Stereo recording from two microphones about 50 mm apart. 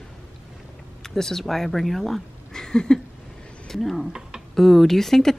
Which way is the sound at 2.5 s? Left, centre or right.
Centre.